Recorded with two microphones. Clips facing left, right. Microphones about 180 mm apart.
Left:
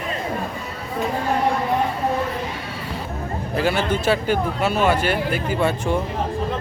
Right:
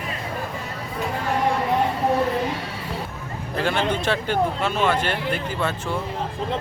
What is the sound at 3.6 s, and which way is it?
Speech, 5° left (ahead or behind).